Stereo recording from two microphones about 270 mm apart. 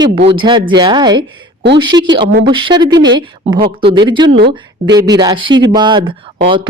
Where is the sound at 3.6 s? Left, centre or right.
Centre.